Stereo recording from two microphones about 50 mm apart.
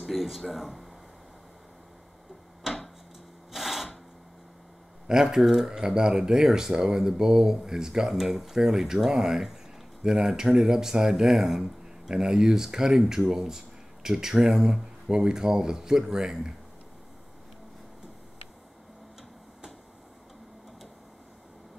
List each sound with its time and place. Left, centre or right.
0.0 s speech: centre
3.5 s a sound: centre
5.0 s speech: centre